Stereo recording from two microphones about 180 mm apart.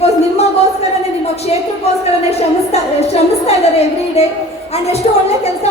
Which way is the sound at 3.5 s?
35° left (ahead or behind).